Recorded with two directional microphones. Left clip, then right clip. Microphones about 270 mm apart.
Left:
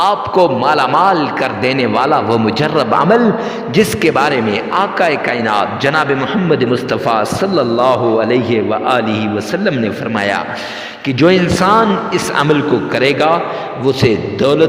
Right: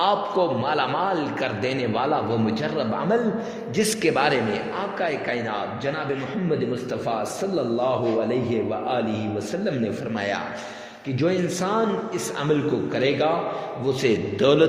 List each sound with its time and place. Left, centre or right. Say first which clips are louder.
0.0 s a man's voice: left 10 dB; left
7.1 s a man's voice: left 12 dB; left